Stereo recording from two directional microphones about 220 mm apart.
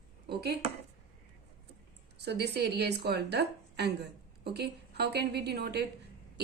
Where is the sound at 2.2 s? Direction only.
50° right (ahead or behind).